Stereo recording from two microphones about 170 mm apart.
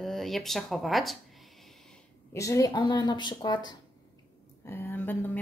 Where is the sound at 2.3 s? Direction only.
20° left (ahead or behind).